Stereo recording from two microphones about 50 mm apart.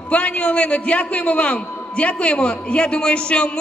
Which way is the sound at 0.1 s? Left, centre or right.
Left.